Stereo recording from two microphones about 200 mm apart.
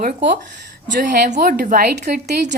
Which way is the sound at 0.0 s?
40° right (ahead or behind).